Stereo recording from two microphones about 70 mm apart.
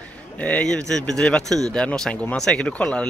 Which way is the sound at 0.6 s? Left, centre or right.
Centre.